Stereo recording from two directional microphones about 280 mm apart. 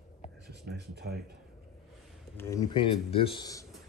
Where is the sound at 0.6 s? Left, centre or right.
Right.